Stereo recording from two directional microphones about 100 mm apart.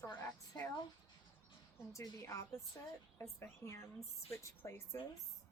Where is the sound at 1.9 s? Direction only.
30° left (ahead or behind).